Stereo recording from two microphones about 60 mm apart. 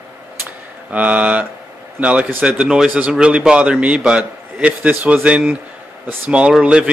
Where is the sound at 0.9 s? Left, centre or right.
Right.